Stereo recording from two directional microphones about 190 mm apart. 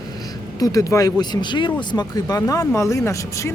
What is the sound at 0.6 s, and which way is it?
Speech, 15° left (ahead or behind).